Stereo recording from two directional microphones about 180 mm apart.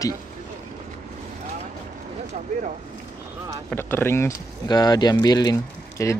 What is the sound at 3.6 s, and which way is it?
Speech, 10° left (ahead or behind).